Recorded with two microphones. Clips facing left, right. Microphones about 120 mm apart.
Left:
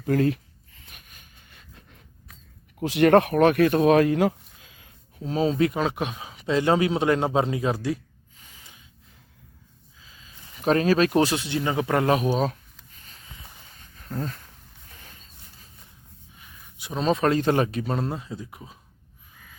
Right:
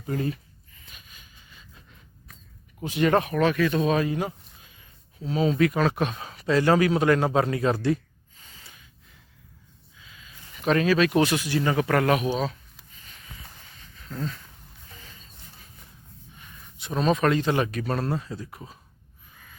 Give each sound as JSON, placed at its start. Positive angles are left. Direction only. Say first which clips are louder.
{"t": 0.0, "sound": "speech", "louder": "left 7 dB", "side_deg": 75}
{"t": 0.9, "sound": "a sound", "louder": "even", "side_deg": 60}
{"t": 2.8, "sound": "speech", "louder": "left 5 dB", "side_deg": 70}
{"t": 5.2, "sound": "speech", "louder": "even", "side_deg": 40}
{"t": 8.4, "sound": "gasp", "louder": "right 1 dB", "side_deg": 10}
{"t": 10.0, "sound": "speech", "louder": "right 1 dB", "side_deg": 30}
{"t": 12.3, "sound": "speech", "louder": "left 3 dB", "side_deg": 45}
{"t": 14.0, "sound": "speech", "louder": "left 1 dB", "side_deg": 45}
{"t": 14.9, "sound": "a sound", "louder": "right 1 dB", "side_deg": 55}
{"t": 16.4, "sound": "a sound", "louder": "even", "side_deg": 10}
{"t": 17.0, "sound": "speech", "louder": "even", "side_deg": 30}
{"t": 17.4, "sound": "speech", "louder": "left 3 dB", "side_deg": 40}
{"t": 17.7, "sound": "speech", "louder": "even", "side_deg": 20}